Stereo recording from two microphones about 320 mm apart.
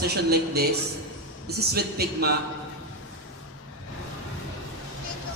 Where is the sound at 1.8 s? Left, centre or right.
Right.